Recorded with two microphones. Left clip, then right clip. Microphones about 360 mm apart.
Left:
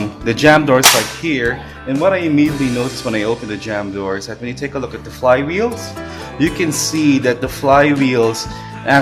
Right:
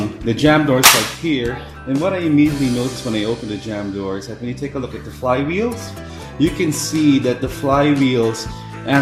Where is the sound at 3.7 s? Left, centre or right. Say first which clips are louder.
Left 5 dB; left.